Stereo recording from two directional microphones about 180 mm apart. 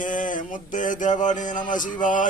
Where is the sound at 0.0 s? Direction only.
45° left (ahead or behind).